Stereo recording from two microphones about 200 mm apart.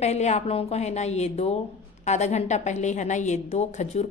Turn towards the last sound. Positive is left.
turn(degrees=35)  # may be behind; listen again after turning